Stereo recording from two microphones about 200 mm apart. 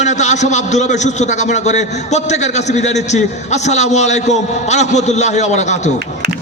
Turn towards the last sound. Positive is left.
turn(degrees=35)  # may be behind; listen again after turning